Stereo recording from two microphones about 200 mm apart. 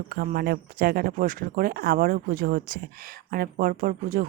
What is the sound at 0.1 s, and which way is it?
Speech, 50° right (ahead or behind).